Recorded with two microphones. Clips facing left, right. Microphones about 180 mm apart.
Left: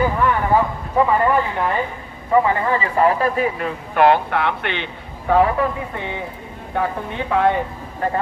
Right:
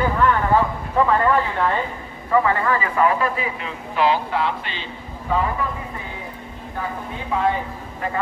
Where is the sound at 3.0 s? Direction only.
45° left (ahead or behind); by 5.4 s 65° left (ahead or behind).